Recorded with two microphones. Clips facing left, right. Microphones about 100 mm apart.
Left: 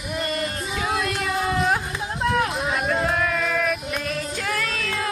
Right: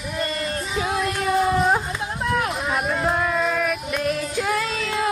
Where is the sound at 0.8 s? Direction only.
25° right (ahead or behind).